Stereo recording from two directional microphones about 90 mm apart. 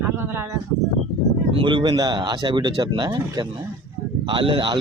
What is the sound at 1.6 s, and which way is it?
Speech, 65° right (ahead or behind).